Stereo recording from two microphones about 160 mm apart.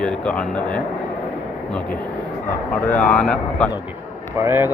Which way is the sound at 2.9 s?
5° left (ahead or behind).